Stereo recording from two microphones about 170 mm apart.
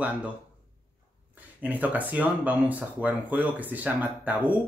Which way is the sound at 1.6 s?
10° right (ahead or behind).